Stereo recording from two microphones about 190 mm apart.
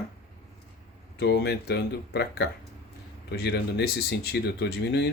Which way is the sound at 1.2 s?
60° left (ahead or behind).